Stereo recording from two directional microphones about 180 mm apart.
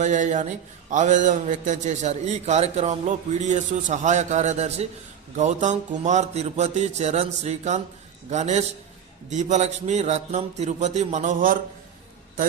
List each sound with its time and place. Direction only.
0.0 s a man's voice: 45° right (ahead or behind)